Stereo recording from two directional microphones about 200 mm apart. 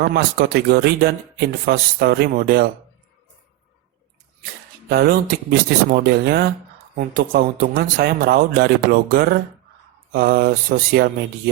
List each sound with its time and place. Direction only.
0.1 s speech: 50° right (ahead or behind)
4.9 s speech: 50° right (ahead or behind)